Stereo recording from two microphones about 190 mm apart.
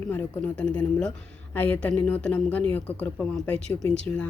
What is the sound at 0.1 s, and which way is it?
Speech, 10° left (ahead or behind).